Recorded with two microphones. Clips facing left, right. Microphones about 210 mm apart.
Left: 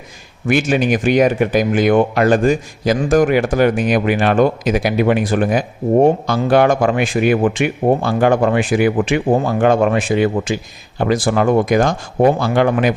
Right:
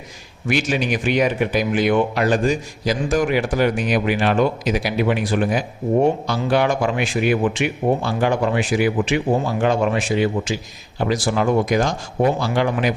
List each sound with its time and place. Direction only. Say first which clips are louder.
0.4 s speech: left 5 dB; 50° left (ahead or behind)